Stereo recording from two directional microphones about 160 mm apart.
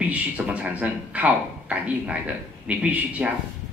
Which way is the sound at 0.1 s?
10° right (ahead or behind).